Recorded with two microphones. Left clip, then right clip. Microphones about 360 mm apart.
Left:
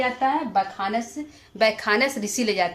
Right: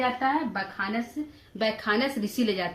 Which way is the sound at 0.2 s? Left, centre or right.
Centre.